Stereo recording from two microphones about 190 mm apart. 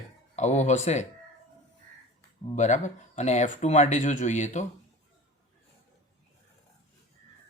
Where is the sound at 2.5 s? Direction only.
40° left (ahead or behind).